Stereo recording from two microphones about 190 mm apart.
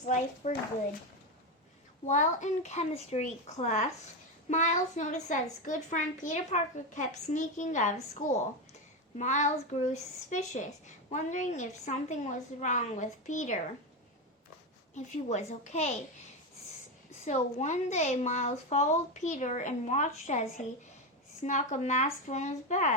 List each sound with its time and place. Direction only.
0.0 s a woman's voice: 40° left (ahead or behind)
2.0 s a woman's voice: 40° left (ahead or behind)
9.1 s a woman's voice: 40° left (ahead or behind)
14.9 s a woman's voice: 40° left (ahead or behind)
17.2 s a woman's voice: 35° left (ahead or behind)